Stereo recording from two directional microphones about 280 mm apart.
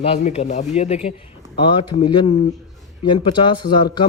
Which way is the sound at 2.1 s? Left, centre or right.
Centre.